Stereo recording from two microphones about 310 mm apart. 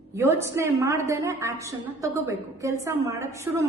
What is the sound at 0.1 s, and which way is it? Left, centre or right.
A woman's voice, centre.